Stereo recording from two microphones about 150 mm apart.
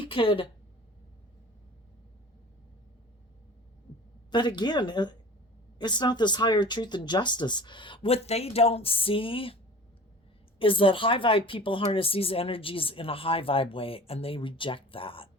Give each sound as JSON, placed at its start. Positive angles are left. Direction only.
{"t": 0.0, "sound": "a woman's voice", "side_deg": 35}
{"t": 4.3, "sound": "speech", "side_deg": 30}
{"t": 10.6, "sound": "speech", "side_deg": 35}